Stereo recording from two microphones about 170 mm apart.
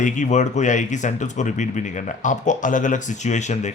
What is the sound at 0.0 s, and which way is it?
Speech, 45° left (ahead or behind).